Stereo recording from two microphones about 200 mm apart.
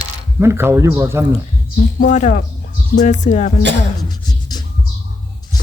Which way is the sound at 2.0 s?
40° left (ahead or behind).